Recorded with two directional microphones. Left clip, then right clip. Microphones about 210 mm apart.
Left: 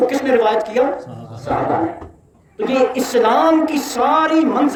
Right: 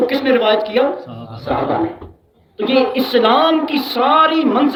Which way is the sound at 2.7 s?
10° left (ahead or behind).